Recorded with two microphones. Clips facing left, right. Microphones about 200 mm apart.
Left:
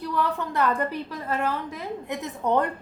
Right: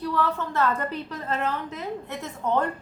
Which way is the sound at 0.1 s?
15° left (ahead or behind).